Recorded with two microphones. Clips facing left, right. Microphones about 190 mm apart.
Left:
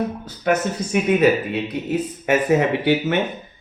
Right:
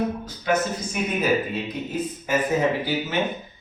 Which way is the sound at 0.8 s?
75° left (ahead or behind).